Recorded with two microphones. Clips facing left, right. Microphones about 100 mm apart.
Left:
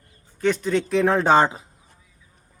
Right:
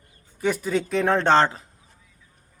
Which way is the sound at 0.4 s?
5° right (ahead or behind).